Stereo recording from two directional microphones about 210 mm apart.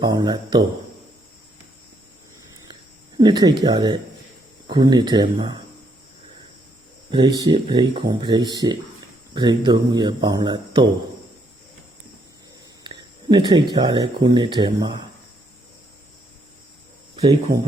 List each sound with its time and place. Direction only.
0.0 s speech: 20° right (ahead or behind)
3.2 s speech: 20° right (ahead or behind)
7.1 s speech: 20° right (ahead or behind)
12.8 s speech: 20° right (ahead or behind)